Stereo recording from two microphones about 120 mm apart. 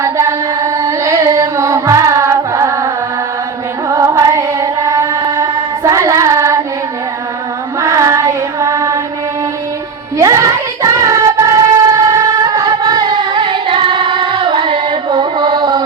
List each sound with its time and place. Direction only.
0.0 s carnatic music: 25° right (ahead or behind)
3.8 s music: 25° right (ahead or behind)
7.8 s music: 25° right (ahead or behind)
10.2 s child singing: 25° right (ahead or behind)